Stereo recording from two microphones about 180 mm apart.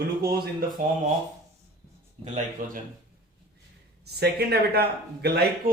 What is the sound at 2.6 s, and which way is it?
Speech, 50° right (ahead or behind).